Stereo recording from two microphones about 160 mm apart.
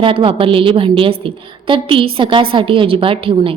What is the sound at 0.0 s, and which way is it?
A woman's voice, 35° right (ahead or behind).